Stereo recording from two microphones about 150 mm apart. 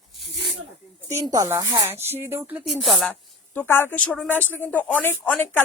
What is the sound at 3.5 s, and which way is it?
Speech, 15° left (ahead or behind).